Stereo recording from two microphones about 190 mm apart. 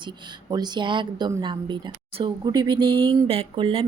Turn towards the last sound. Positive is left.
turn(degrees=-30)  # may be behind; listen again after turning